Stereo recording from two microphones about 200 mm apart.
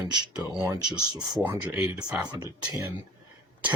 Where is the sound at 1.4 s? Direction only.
10° right (ahead or behind).